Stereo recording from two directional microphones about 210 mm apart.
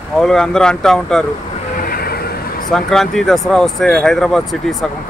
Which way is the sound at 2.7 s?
Centre (ahead or behind).